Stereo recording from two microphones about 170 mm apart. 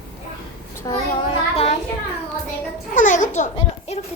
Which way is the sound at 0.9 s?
20° left (ahead or behind).